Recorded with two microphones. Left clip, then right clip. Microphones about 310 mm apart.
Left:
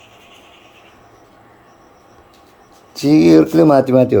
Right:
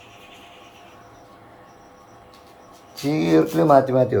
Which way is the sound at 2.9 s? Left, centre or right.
Left.